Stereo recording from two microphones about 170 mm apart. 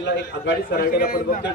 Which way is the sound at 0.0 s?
80° left.